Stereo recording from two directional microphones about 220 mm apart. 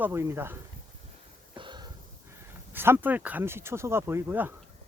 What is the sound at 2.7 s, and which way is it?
Speech, 10° right (ahead or behind).